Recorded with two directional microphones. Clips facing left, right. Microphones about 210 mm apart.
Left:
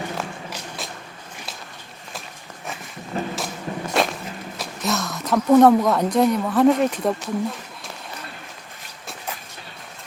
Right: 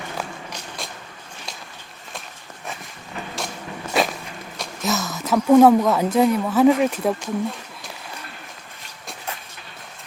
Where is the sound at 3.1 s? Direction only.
35° left (ahead or behind).